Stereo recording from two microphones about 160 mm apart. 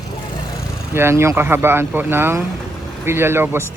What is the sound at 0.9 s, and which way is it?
Speech, 15° right (ahead or behind).